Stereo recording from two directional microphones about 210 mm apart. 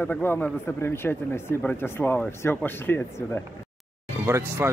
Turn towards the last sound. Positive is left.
turn(degrees=-10)  # may be behind; listen again after turning